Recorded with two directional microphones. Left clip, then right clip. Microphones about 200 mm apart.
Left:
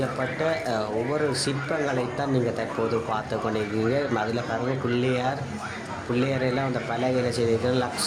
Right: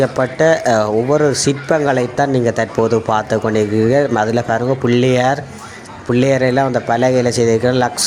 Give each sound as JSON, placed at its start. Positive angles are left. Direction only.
{"t": 0.0, "sound": "speech", "side_deg": -40}